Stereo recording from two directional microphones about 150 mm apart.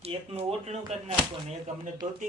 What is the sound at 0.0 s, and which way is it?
Speech, 40° right (ahead or behind).